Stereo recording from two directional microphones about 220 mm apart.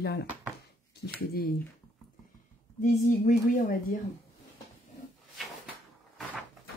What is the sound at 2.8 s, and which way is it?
A woman's voice, 35° left (ahead or behind).